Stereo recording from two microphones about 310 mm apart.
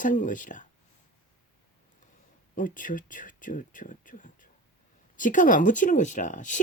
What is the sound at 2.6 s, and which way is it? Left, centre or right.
Speech, left.